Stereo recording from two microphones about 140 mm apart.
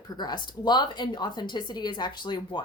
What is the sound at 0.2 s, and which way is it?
A woman's voice, 30° left (ahead or behind).